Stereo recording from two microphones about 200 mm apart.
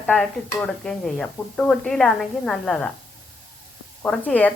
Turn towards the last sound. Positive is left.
turn(degrees=5)  # may be behind; listen again after turning